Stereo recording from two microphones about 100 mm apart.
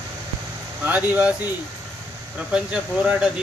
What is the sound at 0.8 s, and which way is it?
Speech, 15° right (ahead or behind).